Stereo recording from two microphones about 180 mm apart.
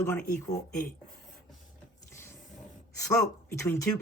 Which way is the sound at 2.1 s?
15° left (ahead or behind).